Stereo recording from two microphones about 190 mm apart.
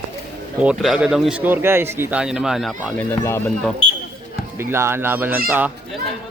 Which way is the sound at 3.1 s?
15° left (ahead or behind).